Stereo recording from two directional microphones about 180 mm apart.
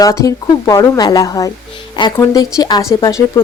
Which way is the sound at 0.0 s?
20° left (ahead or behind).